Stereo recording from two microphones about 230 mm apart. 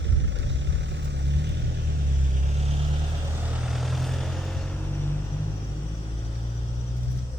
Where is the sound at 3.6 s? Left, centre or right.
Centre.